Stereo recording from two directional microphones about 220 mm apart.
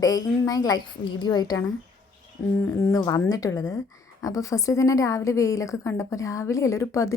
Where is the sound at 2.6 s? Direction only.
10° left (ahead or behind).